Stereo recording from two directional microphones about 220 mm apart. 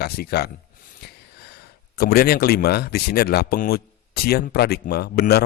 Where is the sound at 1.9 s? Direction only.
45° left (ahead or behind).